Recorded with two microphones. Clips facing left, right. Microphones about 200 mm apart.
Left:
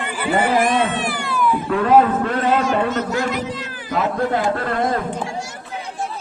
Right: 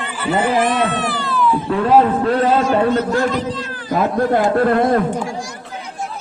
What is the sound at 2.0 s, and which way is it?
A man's voice, 30° right (ahead or behind).